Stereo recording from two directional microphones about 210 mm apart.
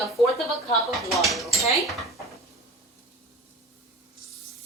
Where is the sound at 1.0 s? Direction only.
Centre (ahead or behind).